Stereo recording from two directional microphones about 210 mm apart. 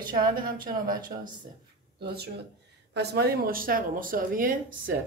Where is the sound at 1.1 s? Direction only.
30° right (ahead or behind).